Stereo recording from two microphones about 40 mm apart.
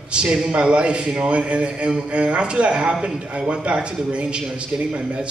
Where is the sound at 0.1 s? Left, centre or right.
Right.